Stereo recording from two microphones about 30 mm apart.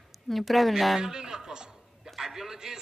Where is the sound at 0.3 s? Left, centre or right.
Centre.